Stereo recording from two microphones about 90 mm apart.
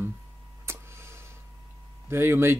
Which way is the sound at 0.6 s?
30° right (ahead or behind).